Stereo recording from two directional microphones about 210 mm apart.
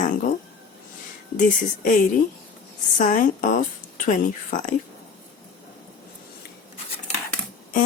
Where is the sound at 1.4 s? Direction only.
40° left (ahead or behind).